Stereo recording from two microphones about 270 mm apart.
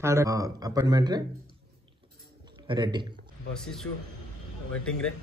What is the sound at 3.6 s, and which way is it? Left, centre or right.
Speech, centre.